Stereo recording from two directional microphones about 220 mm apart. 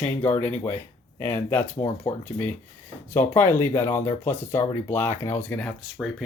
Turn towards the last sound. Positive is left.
turn(degrees=0)  # may be behind; listen again after turning